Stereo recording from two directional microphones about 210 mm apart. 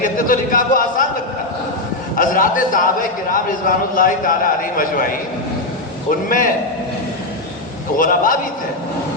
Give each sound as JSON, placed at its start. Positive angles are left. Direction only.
{"t": 0.0, "sound": "a man's voice", "side_deg": 40}
{"t": 2.1, "sound": "a man's voice", "side_deg": 40}
{"t": 7.9, "sound": "a man's voice", "side_deg": 40}